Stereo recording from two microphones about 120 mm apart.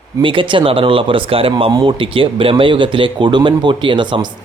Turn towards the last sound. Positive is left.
turn(degrees=-40)  # may be behind; listen again after turning